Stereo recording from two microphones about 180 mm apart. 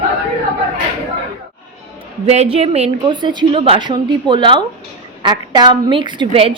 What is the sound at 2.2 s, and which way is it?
A woman's voice, 35° right (ahead or behind).